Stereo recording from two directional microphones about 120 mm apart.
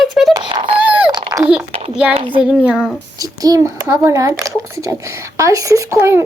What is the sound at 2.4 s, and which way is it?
Speech, 5° right (ahead or behind).